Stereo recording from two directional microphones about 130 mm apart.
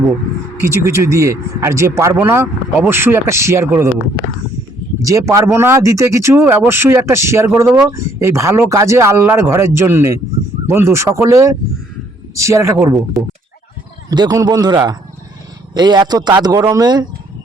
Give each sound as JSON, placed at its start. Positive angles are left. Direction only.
{"t": 0.6, "sound": "speech", "side_deg": -20}
{"t": 5.0, "sound": "speech", "side_deg": -25}
{"t": 14.1, "sound": "a man's voice", "side_deg": -30}